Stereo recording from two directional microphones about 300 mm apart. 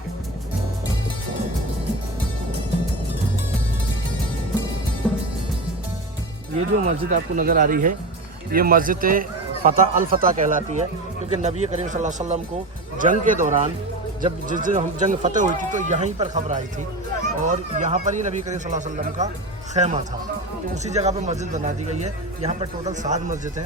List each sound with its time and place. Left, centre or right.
5.0 s music: centre
6.8 s speech: right